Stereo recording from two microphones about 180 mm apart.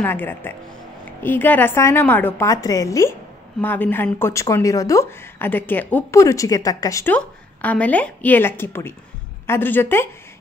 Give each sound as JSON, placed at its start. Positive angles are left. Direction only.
{"t": 0.0, "sound": "speech", "side_deg": 10}